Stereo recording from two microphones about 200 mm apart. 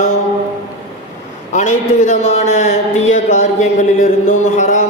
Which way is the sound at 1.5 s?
35° left (ahead or behind).